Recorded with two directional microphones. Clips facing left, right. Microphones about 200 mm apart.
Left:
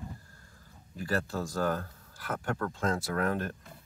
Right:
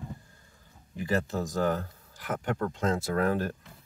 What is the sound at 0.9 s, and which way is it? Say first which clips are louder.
Speech: right 3 dB; 20° right (ahead or behind).